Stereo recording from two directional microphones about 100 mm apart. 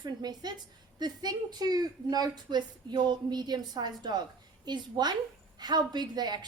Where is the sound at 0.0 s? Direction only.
45° right (ahead or behind).